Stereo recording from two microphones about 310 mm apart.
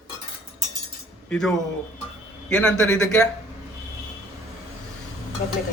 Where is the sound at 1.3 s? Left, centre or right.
Centre.